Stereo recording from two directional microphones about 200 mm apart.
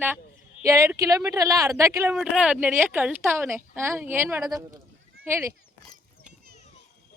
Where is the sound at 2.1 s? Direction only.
Centre (ahead or behind).